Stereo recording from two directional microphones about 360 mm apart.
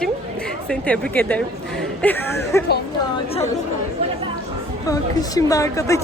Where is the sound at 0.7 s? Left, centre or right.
Centre.